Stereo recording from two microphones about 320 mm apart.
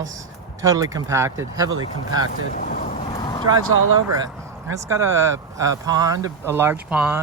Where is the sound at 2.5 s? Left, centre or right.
Left.